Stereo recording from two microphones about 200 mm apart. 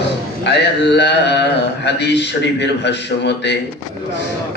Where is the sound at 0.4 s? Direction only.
60° left (ahead or behind).